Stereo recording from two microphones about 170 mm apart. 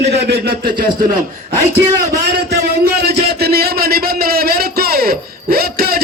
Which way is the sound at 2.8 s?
70° right (ahead or behind).